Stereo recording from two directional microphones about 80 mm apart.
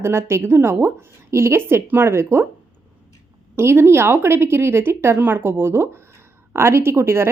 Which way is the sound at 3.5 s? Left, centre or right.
Right.